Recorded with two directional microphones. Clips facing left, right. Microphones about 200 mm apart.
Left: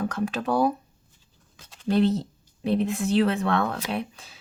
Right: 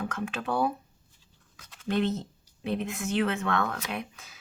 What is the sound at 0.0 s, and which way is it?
Speech, 40° left (ahead or behind).